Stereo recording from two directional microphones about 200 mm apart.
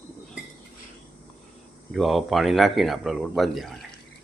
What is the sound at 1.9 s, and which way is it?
Speech, centre (ahead or behind).